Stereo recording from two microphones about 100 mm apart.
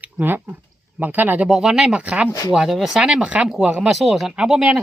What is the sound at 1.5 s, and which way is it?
Speech, 5° right (ahead or behind).